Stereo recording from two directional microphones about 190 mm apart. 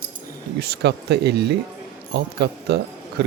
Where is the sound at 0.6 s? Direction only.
60° right (ahead or behind).